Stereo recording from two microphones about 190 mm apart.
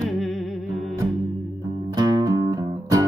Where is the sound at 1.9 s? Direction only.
20° right (ahead or behind).